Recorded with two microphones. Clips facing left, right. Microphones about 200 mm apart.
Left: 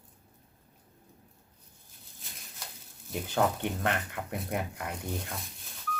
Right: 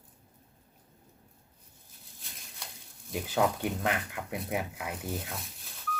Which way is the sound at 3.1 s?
5° right (ahead or behind).